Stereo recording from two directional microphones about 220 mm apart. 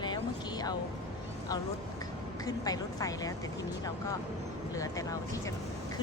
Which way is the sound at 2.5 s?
15° left (ahead or behind).